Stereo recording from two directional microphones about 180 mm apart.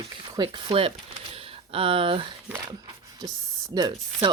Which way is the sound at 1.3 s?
30° right (ahead or behind).